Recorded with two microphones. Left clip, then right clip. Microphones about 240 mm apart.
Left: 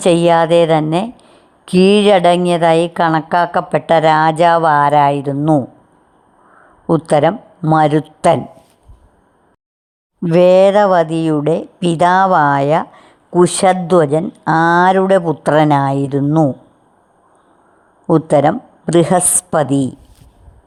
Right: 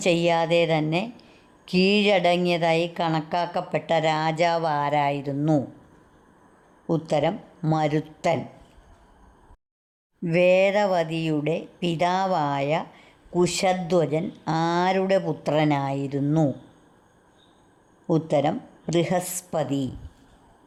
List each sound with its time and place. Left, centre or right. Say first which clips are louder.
0.0 s speech: left 11 dB; left
6.8 s speech: left 11 dB; left
10.2 s speech: left 10 dB; left
18.0 s speech: left 11 dB; left